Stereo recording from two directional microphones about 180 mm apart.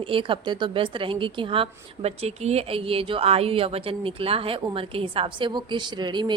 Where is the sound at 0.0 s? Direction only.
30° right (ahead or behind).